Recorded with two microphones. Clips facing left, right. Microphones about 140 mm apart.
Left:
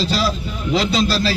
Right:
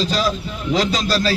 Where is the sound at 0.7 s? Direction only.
40° right (ahead or behind).